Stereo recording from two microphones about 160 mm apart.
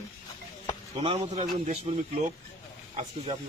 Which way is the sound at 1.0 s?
40° right (ahead or behind).